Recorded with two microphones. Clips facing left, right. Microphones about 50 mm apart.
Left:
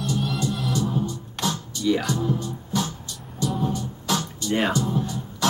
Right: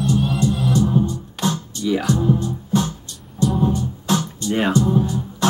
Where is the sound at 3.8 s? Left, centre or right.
Centre.